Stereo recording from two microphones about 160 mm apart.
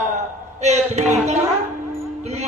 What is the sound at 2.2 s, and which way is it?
Music, 45° right (ahead or behind).